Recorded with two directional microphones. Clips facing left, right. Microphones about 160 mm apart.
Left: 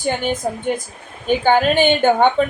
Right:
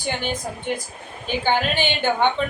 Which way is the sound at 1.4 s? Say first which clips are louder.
Left 7 dB; 50° left (ahead or behind).